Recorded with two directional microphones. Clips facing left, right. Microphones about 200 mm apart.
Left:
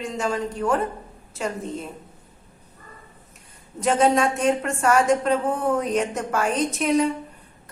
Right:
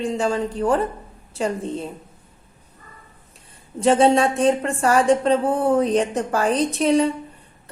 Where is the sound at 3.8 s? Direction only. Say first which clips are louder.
Right 4 dB; 30° right (ahead or behind).